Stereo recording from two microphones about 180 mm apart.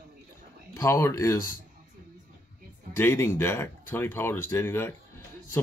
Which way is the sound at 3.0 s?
15° left (ahead or behind).